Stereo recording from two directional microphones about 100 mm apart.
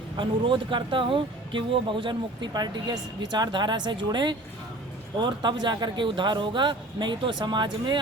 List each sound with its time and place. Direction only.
0.2 s speech: 55° right (ahead or behind)